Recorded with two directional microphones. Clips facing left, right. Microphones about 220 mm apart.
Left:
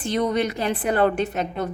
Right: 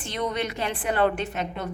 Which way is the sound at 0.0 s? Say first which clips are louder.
Left 6 dB; 40° left (ahead or behind).